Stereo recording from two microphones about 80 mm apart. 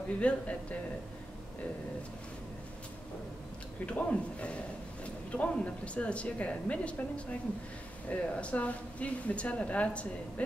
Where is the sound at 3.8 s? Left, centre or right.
Centre.